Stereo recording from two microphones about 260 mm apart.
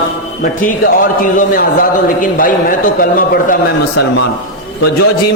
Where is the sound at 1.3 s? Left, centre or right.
Left.